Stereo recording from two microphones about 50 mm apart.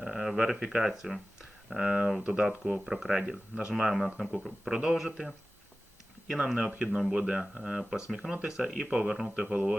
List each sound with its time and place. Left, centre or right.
0.0 s speech: centre
3.2 s speech: right
3.9 s speech: centre
6.2 s speech: centre
9.3 s speech: right